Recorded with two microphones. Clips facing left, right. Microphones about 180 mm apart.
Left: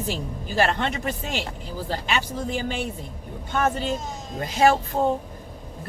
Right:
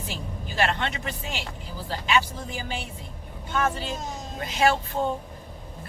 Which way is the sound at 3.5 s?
45° left (ahead or behind).